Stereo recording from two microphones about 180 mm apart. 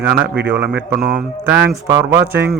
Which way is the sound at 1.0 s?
55° right (ahead or behind).